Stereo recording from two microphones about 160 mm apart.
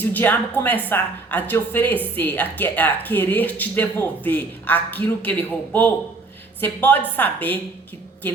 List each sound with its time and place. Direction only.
0.0 s speech: 10° left (ahead or behind)